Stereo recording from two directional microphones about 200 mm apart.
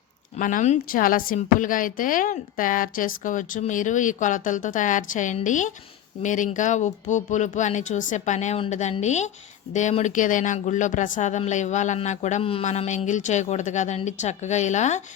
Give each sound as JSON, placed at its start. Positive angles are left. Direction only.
{"t": 0.3, "sound": "speech", "side_deg": 40}